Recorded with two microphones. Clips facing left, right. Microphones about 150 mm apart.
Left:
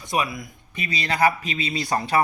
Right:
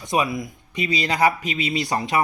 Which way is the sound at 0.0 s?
20° right (ahead or behind).